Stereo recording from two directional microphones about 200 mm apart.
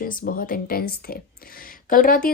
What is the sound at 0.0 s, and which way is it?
Speech, 45° left (ahead or behind).